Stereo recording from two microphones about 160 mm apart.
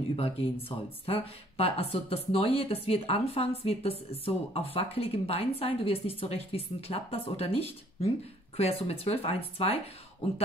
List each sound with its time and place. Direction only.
0.1 s a woman's voice: 40° left (ahead or behind)